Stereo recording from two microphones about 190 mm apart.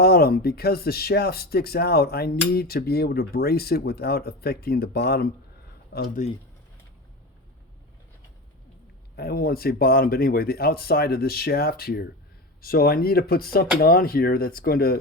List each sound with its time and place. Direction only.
0.0 s speech: 55° left (ahead or behind)
9.1 s speech: 55° left (ahead or behind)